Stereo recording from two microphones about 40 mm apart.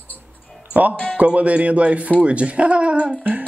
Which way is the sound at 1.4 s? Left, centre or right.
Right.